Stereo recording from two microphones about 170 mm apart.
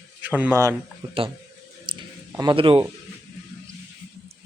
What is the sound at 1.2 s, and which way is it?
Speech, 35° right (ahead or behind).